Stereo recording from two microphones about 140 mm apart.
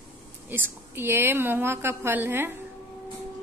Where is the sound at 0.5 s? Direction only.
15° right (ahead or behind).